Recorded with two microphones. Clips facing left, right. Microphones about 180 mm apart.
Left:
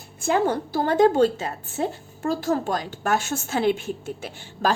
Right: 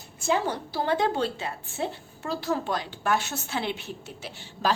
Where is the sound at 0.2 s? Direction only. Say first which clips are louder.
Left 5 dB; 50° left (ahead or behind).